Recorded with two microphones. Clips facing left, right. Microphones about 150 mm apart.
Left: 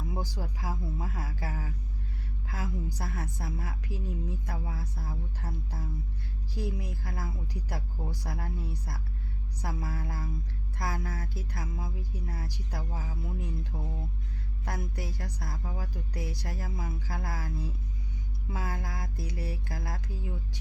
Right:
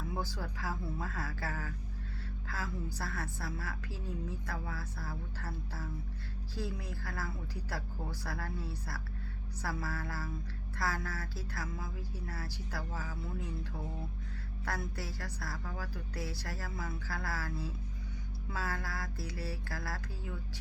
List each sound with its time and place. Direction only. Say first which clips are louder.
0.0 s a woman's voice: left 2 dB; 15° left (ahead or behind)
14.6 s a woman's voice: left 2 dB; 15° left (ahead or behind)